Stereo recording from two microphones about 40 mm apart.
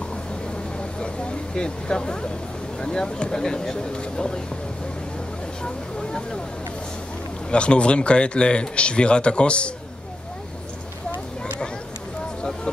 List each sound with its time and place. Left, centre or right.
0.9 s vehicle: centre
2.8 s speech: centre
7.5 s speech: left